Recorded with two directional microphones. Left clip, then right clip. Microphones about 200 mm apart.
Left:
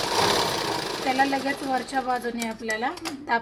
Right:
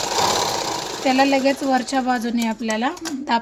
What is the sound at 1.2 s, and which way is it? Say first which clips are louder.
Speech: right 8 dB; 60° right (ahead or behind).